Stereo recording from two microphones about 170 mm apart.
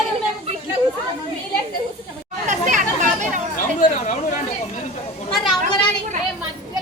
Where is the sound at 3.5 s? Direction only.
50° left (ahead or behind).